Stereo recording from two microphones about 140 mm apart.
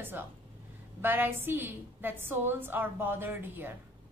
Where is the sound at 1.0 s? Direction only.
15° right (ahead or behind).